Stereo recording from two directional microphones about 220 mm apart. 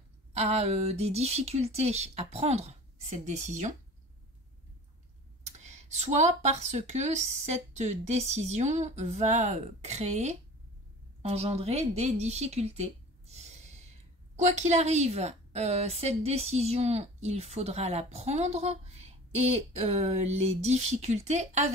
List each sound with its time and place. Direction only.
0.3 s a woman's voice: 30° right (ahead or behind)
5.6 s a woman's voice: 30° right (ahead or behind)